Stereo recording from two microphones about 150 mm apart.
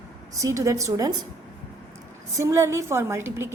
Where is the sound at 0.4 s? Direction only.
20° right (ahead or behind).